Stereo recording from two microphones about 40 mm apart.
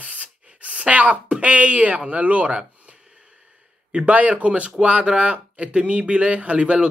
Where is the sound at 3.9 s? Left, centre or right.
Right.